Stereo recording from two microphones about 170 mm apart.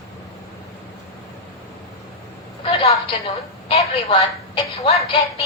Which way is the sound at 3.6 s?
35° left (ahead or behind).